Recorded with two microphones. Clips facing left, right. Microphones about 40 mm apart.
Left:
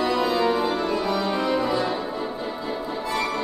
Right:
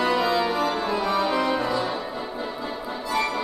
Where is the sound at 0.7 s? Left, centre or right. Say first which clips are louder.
Even; centre.